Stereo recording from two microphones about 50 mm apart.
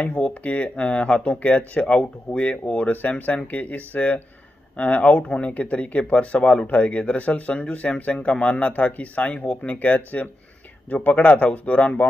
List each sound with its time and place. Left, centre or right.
0.1 s speech: left